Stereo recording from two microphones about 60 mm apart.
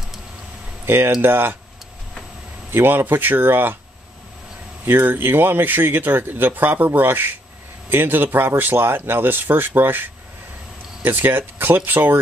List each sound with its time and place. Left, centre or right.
0.8 s speech: right
2.7 s speech: right
4.8 s speech: right